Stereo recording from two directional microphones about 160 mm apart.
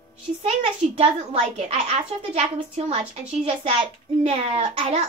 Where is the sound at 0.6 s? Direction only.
40° right (ahead or behind).